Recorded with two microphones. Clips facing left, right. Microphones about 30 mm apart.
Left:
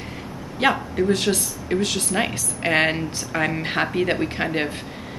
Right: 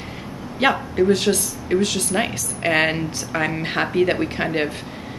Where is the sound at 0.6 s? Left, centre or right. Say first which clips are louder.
Right 2 dB; centre.